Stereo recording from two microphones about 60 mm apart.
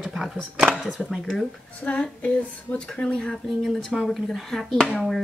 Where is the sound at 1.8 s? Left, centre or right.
Centre.